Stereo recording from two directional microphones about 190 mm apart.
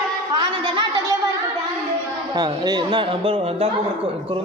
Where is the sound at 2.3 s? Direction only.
20° right (ahead or behind).